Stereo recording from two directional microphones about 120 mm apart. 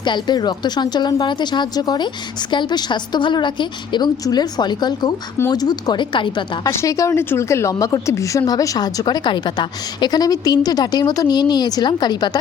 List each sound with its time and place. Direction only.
0.0 s a woman's voice: 40° left (ahead or behind)
6.7 s a woman's voice: 25° left (ahead or behind)